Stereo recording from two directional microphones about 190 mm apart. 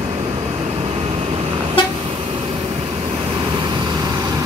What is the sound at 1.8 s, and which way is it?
Vehicle, 25° left (ahead or behind).